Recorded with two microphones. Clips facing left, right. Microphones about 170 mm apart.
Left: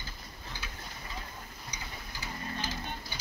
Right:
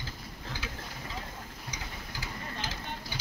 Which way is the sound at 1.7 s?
90° right.